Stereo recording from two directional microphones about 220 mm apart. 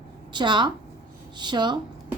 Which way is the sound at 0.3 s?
20° right (ahead or behind).